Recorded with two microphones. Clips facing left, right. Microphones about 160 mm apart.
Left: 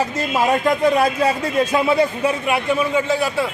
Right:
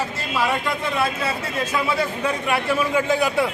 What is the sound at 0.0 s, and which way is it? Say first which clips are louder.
Speech: left 5 dB; 45° left (ahead or behind).